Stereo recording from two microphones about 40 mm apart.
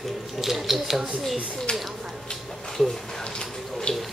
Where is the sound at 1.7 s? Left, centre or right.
Left.